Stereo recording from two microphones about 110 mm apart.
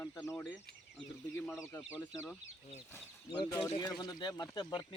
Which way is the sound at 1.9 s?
20° left (ahead or behind).